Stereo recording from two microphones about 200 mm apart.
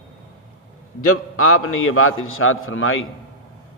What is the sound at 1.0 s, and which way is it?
A man's voice, 90° left.